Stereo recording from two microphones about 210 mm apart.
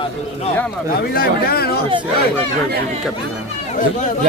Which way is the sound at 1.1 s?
45° left (ahead or behind).